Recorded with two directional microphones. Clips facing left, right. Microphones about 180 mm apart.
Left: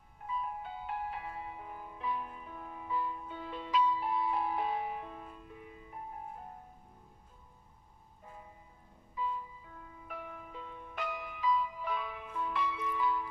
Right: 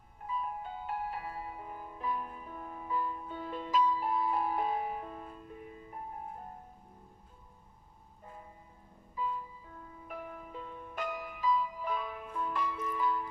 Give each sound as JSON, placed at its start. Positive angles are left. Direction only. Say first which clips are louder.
{"t": 0.3, "sound": "music", "louder": "right 1 dB", "side_deg": -45}
{"t": 10.1, "sound": "music", "louder": "right 2 dB", "side_deg": -45}